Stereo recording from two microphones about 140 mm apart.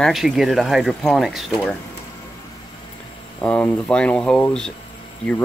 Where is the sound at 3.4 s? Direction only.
10° left (ahead or behind).